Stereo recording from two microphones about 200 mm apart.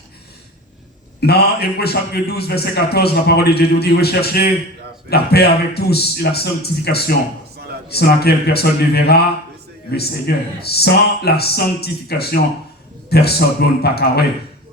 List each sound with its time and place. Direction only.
1.2 s a man's voice: 50° left (ahead or behind)